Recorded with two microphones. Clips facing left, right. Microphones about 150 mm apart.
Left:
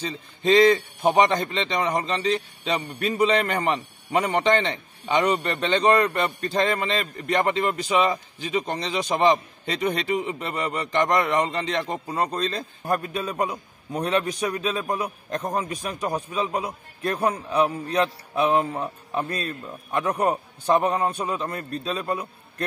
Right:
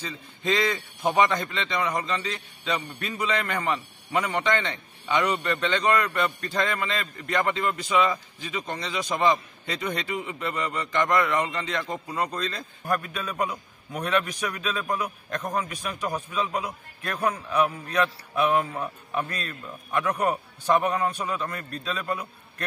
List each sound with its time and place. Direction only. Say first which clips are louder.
0.0 s a man's voice: left 6 dB; 30° left (ahead or behind)